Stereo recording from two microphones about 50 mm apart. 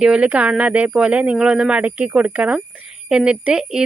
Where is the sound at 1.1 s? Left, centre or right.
Right.